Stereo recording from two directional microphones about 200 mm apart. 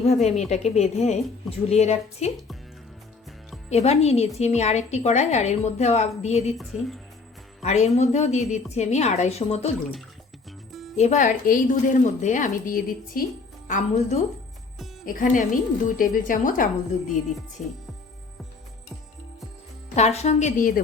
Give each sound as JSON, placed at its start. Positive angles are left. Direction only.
{"t": 0.1, "sound": "a woman's voice", "side_deg": 35}
{"t": 3.7, "sound": "a woman's voice", "side_deg": 30}
{"t": 6.6, "sound": "speech", "side_deg": 0}
{"t": 7.6, "sound": "a woman's voice", "side_deg": 35}
{"t": 10.7, "sound": "music", "side_deg": 0}
{"t": 10.9, "sound": "a woman's voice", "side_deg": 35}
{"t": 20.0, "sound": "a woman's voice", "side_deg": 35}